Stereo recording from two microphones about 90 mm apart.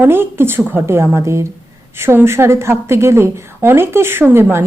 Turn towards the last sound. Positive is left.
turn(degrees=-25)  # may be behind; listen again after turning